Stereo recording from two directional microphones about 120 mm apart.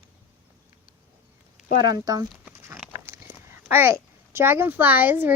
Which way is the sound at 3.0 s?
20° right (ahead or behind).